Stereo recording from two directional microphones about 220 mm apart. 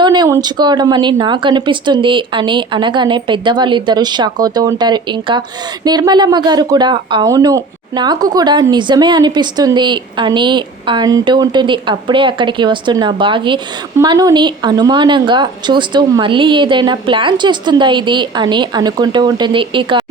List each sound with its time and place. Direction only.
0.0 s speech: 20° right (ahead or behind)